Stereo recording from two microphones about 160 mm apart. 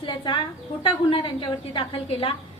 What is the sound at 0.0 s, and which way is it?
A woman's voice, 30° left (ahead or behind).